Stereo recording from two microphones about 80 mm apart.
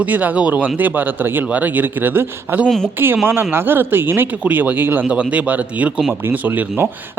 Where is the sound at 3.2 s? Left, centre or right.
Right.